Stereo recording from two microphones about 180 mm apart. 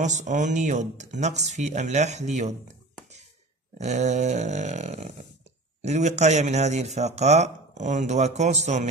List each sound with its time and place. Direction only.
0.0 s speech: 40° right (ahead or behind)
3.7 s speech: 40° right (ahead or behind)